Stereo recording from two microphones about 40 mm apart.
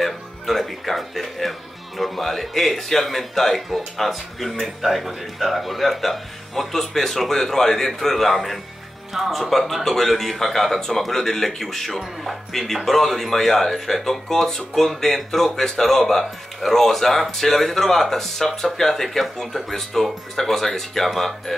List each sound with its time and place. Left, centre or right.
0.0 s a man's voice: centre